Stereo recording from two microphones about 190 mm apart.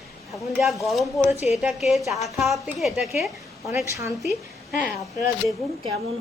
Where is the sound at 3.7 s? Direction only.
15° right (ahead or behind).